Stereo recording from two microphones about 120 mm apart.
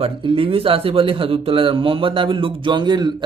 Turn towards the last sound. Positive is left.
turn(degrees=-40)  # may be behind; listen again after turning